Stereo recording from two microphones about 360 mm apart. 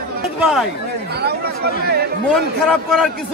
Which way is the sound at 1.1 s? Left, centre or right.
Right.